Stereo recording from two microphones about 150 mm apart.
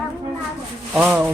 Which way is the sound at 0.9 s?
10° right (ahead or behind).